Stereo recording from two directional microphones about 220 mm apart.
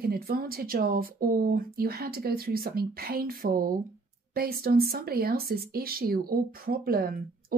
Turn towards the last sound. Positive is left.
turn(degrees=-40)  # may be behind; listen again after turning